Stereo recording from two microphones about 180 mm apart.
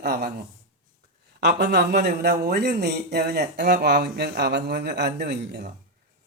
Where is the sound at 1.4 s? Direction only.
65° right (ahead or behind).